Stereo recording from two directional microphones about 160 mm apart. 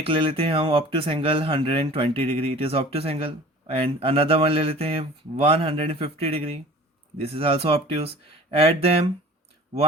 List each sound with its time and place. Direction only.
0.0 s speech: 35° right (ahead or behind)